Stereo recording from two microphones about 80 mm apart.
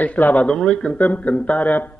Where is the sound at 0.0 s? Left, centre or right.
Centre.